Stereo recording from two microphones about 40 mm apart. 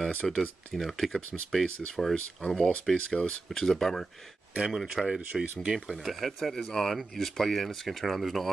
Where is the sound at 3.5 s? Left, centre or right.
Centre.